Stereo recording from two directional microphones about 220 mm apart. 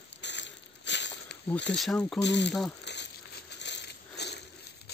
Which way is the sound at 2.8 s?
50° left (ahead or behind).